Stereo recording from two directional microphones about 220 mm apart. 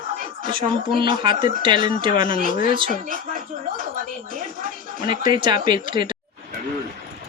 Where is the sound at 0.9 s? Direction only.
20° right (ahead or behind).